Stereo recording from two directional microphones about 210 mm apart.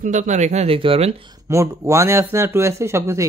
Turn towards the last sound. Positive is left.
turn(degrees=-15)  # may be behind; listen again after turning